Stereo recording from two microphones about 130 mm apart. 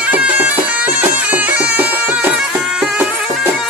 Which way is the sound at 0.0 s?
10° right (ahead or behind).